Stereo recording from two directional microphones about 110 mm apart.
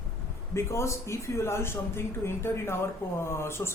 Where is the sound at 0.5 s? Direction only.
25° left (ahead or behind).